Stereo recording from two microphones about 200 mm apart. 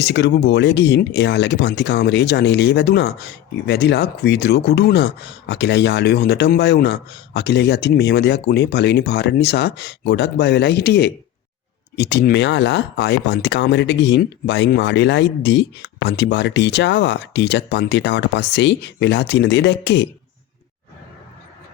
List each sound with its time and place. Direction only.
0.0 s speech: 60° left (ahead or behind)